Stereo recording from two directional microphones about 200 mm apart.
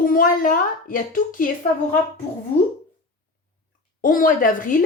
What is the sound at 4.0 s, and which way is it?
Speech, 45° left (ahead or behind).